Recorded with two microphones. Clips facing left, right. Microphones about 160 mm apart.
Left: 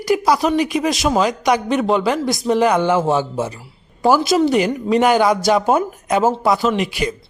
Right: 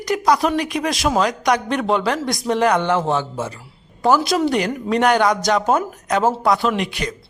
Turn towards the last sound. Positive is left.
turn(degrees=5)  # may be behind; listen again after turning